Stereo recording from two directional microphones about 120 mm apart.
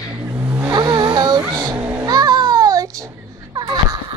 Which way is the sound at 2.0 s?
35° right (ahead or behind).